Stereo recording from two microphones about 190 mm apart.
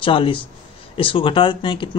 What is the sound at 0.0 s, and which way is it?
Speech, 25° left (ahead or behind).